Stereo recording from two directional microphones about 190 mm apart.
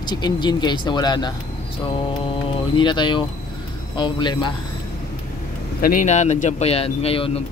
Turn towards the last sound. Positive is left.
turn(degrees=30)  # may be behind; listen again after turning